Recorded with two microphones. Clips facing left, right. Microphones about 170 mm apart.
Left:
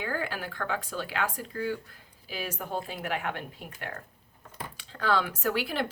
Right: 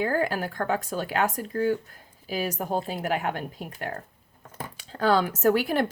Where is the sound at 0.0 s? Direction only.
40° right (ahead or behind).